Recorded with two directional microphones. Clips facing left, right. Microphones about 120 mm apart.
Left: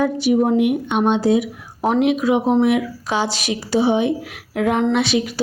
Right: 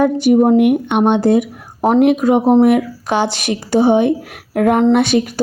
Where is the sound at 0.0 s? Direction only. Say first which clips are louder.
Right 5 dB; 50° right (ahead or behind).